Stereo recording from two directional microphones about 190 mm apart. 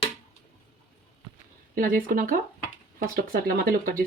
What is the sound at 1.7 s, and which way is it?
Speech, 50° right (ahead or behind).